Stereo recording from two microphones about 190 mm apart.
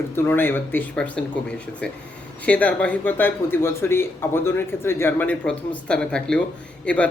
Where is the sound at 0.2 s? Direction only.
10° left (ahead or behind).